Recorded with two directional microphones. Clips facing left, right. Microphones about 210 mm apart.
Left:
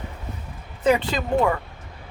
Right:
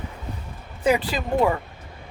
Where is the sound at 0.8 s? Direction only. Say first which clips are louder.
Left 1 dB; 10° right (ahead or behind).